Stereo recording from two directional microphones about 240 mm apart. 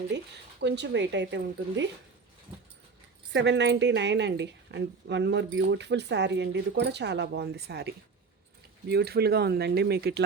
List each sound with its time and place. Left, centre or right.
0.1 s a woman's voice: right
3.3 s a woman's voice: right